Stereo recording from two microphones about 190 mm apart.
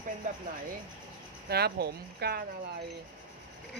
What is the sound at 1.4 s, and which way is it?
Speech, 55° right (ahead or behind).